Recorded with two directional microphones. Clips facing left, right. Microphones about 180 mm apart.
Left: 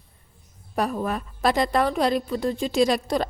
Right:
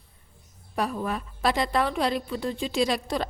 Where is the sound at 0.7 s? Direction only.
45° left (ahead or behind).